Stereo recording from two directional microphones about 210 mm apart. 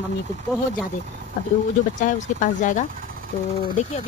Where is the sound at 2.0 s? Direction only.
35° left (ahead or behind).